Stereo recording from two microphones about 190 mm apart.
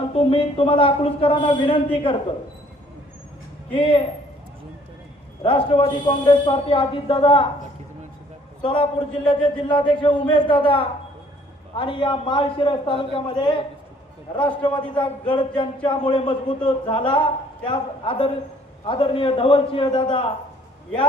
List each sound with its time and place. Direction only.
0.1 s a man's voice: 30° left (ahead or behind)
3.7 s a man's voice: 25° left (ahead or behind)
5.4 s a man's voice: 25° left (ahead or behind)
8.6 s a man's voice: 25° left (ahead or behind)
14.6 s a man's voice: 25° left (ahead or behind)